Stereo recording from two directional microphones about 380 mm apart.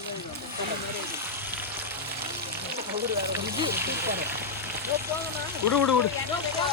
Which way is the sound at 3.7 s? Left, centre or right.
Right.